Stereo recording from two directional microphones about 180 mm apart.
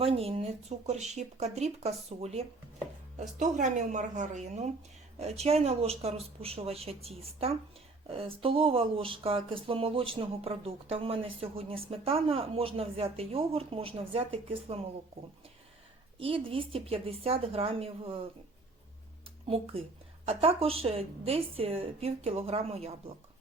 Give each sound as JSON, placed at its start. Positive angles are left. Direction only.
{"t": 0.0, "sound": "speech", "side_deg": -30}
{"t": 16.1, "sound": "speech", "side_deg": -30}
{"t": 20.2, "sound": "speech", "side_deg": -35}